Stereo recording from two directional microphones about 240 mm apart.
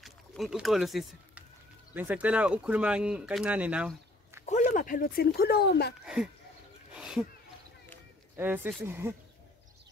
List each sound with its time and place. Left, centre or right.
0.0 s speech: centre
4.5 s speech: left
6.0 s speech: centre
6.9 s a sound: centre
8.4 s speech: centre